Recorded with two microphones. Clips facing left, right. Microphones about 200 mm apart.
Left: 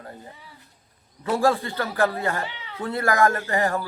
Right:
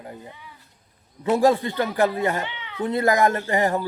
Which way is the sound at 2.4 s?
40° left (ahead or behind).